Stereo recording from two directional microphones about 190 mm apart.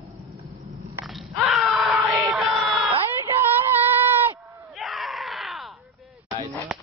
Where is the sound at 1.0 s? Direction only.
Centre (ahead or behind).